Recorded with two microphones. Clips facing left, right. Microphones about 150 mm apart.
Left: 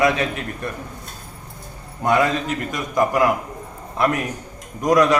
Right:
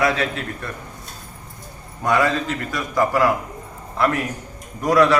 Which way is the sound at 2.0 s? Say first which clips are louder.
Left 1 dB; 25° left (ahead or behind).